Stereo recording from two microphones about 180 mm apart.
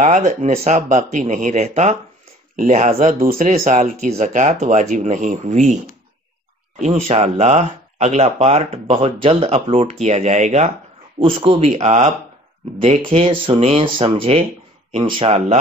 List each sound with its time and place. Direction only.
0.0 s speech: 45° right (ahead or behind)
6.8 s speech: 35° right (ahead or behind)